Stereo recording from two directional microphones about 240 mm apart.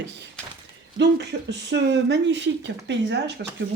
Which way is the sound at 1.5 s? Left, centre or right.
Right.